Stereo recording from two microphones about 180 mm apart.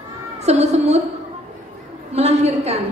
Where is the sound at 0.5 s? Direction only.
35° right (ahead or behind).